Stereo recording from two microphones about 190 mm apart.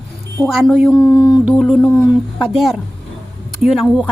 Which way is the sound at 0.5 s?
Centre (ahead or behind).